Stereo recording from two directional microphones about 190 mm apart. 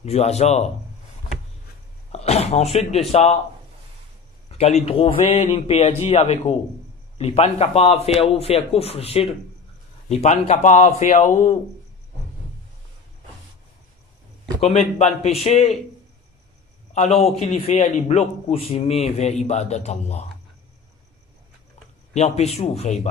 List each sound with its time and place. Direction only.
0.0 s a man's voice: 35° left (ahead or behind)
2.1 s speech: 35° left (ahead or behind)
4.5 s a man's voice: 35° left (ahead or behind)
14.6 s a man's voice: 35° left (ahead or behind)
16.9 s a man's voice: 35° left (ahead or behind)
22.1 s a man's voice: 35° left (ahead or behind)